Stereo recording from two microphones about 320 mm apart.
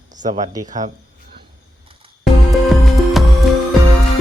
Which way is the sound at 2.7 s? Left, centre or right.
Centre.